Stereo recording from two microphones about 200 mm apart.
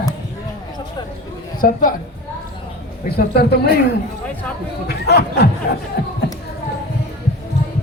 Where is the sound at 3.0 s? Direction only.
50° left (ahead or behind).